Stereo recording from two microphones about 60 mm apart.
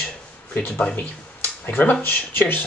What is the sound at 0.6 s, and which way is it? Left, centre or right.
Speech, left.